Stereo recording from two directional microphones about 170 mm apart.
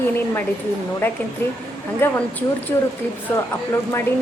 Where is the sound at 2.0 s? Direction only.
10° left (ahead or behind).